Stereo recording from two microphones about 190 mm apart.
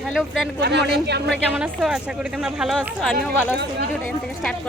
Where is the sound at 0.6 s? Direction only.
60° right (ahead or behind).